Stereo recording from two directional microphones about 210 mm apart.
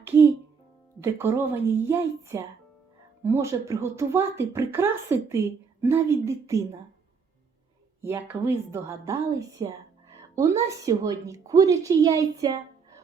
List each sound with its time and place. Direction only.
0.0 s music: 10° right (ahead or behind)
1.0 s a woman's voice: 10° right (ahead or behind)
8.0 s a woman's voice: 10° right (ahead or behind)